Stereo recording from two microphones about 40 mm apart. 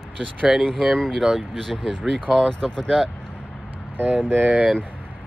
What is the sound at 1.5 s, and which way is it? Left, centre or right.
Speech, centre.